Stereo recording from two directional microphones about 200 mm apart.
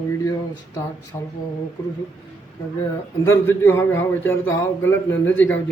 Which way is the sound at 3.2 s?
10° left (ahead or behind).